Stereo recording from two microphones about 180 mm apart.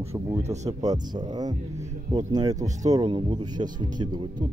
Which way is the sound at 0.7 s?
20° right (ahead or behind).